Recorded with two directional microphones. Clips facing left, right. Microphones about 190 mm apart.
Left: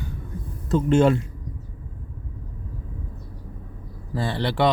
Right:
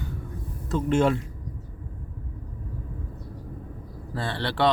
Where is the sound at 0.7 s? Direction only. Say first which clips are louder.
Left 4 dB; 30° left (ahead or behind).